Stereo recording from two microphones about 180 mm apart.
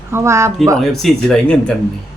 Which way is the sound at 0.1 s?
15° right (ahead or behind).